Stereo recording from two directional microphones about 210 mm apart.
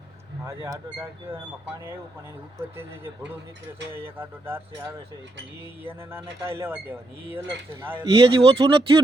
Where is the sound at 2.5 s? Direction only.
10° right (ahead or behind).